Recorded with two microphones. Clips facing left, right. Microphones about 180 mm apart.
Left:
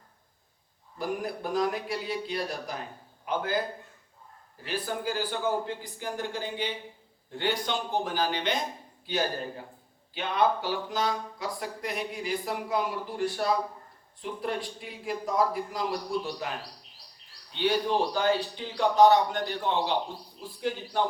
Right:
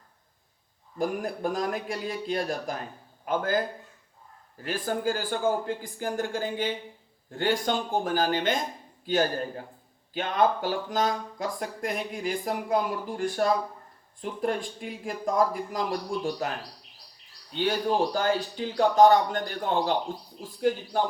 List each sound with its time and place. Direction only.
0.9 s a man's voice: 45° right (ahead or behind)
4.6 s a man's voice: 45° right (ahead or behind)
10.2 s a man's voice: 45° right (ahead or behind)